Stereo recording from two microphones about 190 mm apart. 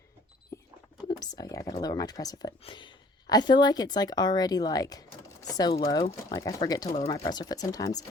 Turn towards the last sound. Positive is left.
turn(degrees=20)  # may be behind; listen again after turning